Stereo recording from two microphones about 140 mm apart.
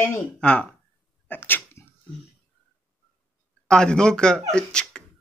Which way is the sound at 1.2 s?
15° left (ahead or behind).